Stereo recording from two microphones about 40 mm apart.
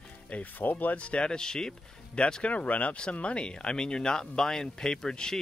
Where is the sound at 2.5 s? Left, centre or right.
Left.